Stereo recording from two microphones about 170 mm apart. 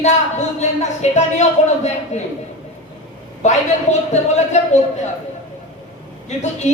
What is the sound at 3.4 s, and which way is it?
Speech, 40° left (ahead or behind).